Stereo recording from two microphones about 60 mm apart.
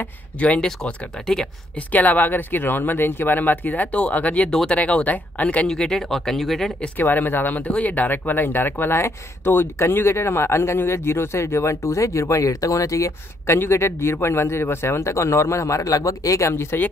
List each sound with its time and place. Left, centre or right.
0.4 s speech: left
1.8 s speech: left
4.5 s speech: centre
4.7 s speech: left
5.7 s speech: centre
7.0 s speech: left
13.6 s speech: left
16.4 s speech: left